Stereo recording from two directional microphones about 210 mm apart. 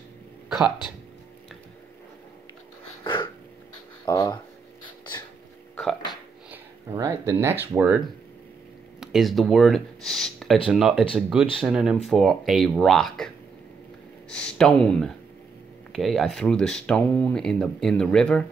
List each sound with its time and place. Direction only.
0.5 s speech: 5° right (ahead or behind)
3.0 s a sound: 25° left (ahead or behind)
4.0 s speech: 20° left (ahead or behind)
6.5 s speech: 15° right (ahead or behind)
9.0 s speech: centre (ahead or behind)
14.3 s speech: 5° left (ahead or behind)